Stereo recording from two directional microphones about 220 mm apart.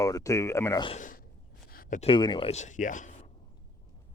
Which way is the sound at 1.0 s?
35° left (ahead or behind).